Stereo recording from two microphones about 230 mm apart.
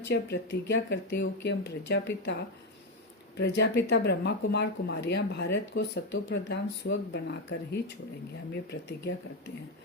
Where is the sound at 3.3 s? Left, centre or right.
Left.